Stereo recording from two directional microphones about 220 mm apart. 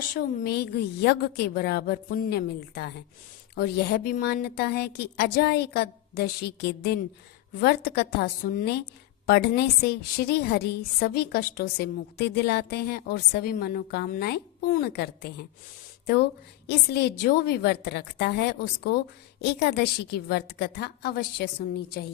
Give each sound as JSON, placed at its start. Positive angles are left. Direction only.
{"t": 0.2, "sound": "a woman's voice", "side_deg": 45}